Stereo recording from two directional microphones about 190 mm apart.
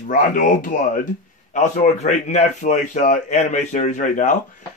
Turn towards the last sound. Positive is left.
turn(degrees=40)  # may be behind; listen again after turning